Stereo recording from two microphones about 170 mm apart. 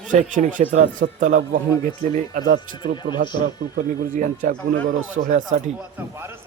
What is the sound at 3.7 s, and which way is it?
Speech, 50° right (ahead or behind).